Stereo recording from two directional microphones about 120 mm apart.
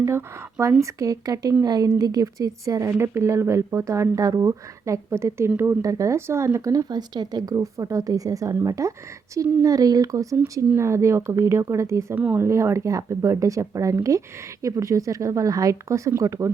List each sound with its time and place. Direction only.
0.0 s a woman's voice: 20° right (ahead or behind)
12.1 s speech: 15° right (ahead or behind)
12.5 s a woman's voice: 25° right (ahead or behind)